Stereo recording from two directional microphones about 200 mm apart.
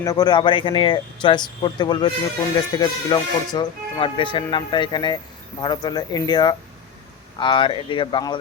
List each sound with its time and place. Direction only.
0.0 s speech: 20° left (ahead or behind)